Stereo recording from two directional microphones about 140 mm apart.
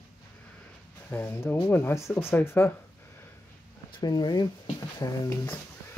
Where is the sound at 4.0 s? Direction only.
30° left (ahead or behind).